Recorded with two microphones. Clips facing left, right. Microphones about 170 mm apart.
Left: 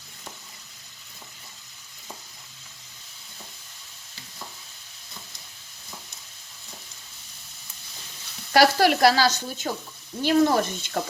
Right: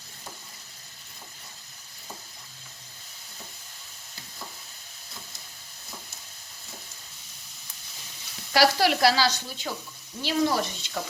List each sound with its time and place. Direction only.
8.5 s speech: 50° left (ahead or behind)